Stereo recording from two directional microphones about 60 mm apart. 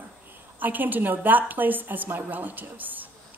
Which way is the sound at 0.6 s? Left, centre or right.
Right.